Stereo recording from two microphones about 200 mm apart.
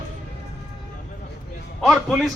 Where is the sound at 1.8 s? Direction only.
5° right (ahead or behind).